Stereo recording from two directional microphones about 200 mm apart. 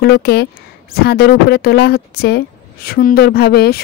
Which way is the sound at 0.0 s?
55° left (ahead or behind).